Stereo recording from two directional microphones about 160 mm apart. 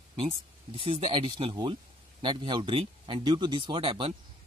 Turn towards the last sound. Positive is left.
turn(degrees=-35)  # may be behind; listen again after turning